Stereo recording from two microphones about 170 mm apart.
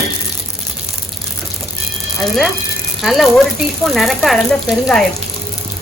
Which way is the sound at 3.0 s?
Centre (ahead or behind).